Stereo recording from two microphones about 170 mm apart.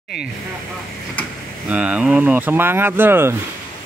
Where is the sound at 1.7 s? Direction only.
5° right (ahead or behind).